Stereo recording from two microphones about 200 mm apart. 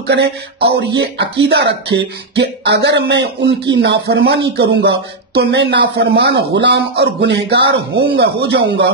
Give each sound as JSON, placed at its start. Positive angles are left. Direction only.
{"t": 0.0, "sound": "speech", "side_deg": -60}